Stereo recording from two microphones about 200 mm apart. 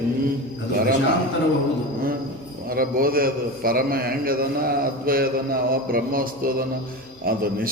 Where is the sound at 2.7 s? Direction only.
45° right (ahead or behind).